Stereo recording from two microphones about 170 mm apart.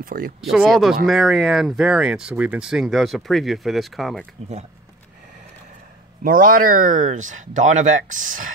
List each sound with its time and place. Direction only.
0.0 s speech: 55° right (ahead or behind)
0.4 s speech: centre (ahead or behind)
6.2 s speech: 55° right (ahead or behind)